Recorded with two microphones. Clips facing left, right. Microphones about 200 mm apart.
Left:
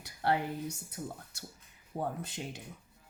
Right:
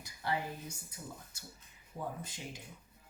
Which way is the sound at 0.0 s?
65° left (ahead or behind).